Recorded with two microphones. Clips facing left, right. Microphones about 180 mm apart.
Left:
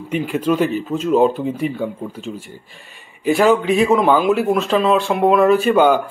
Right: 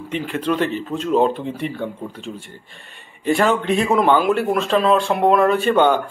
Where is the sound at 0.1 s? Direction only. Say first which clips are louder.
Left 4 dB; 10° left (ahead or behind).